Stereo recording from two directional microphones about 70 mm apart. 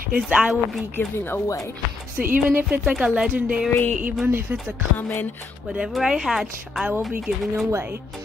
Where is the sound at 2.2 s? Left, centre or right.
Centre.